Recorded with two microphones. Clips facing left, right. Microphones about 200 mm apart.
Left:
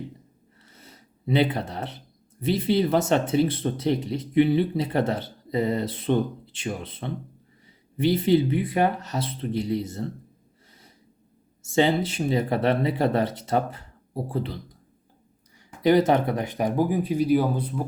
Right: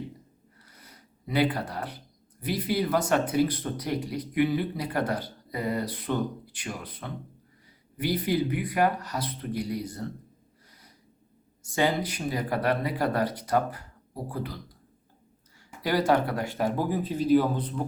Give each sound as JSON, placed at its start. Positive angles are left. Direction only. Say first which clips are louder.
{"t": 0.6, "sound": "a sound", "louder": "left 4 dB", "side_deg": 25}
{"t": 2.4, "sound": "speech", "louder": "left 5 dB", "side_deg": 25}
{"t": 11.6, "sound": "speech", "louder": "left 5 dB", "side_deg": 25}
{"t": 15.8, "sound": "speech", "louder": "left 5 dB", "side_deg": 20}